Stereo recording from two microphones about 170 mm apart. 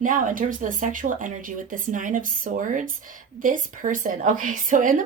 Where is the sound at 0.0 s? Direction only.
50° right (ahead or behind).